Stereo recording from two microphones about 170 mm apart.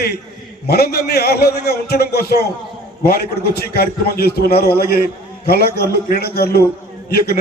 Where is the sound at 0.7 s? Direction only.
70° left (ahead or behind).